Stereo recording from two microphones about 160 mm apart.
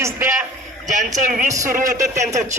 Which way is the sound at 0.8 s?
50° right (ahead or behind).